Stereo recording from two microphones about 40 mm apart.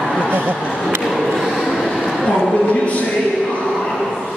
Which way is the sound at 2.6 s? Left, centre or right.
Left.